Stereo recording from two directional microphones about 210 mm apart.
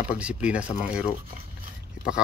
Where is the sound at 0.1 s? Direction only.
5° right (ahead or behind).